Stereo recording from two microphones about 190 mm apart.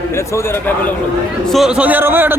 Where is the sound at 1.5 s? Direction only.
5° right (ahead or behind).